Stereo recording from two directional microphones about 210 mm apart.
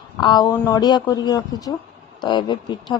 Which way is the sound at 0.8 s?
20° left (ahead or behind).